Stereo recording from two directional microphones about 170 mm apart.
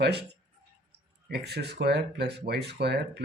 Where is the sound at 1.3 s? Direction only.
75° right (ahead or behind).